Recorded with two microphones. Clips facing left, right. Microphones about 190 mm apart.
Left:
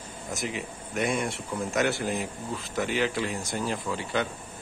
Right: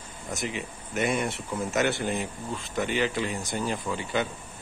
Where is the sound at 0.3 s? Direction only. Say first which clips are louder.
Even; centre (ahead or behind).